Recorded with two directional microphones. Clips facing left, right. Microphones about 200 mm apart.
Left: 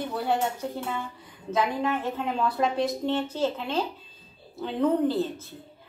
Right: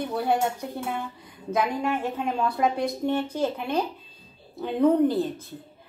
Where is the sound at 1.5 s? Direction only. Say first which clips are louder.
Right 1 dB; 10° right (ahead or behind).